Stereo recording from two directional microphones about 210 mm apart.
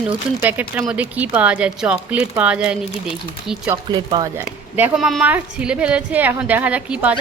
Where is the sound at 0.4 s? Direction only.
5° right (ahead or behind).